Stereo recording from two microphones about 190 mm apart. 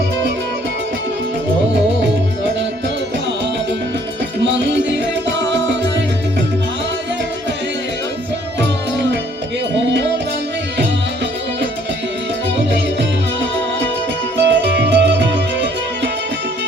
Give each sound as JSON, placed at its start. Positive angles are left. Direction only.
{"t": 4.5, "sound": "music", "side_deg": -70}
{"t": 14.3, "sound": "music", "side_deg": -65}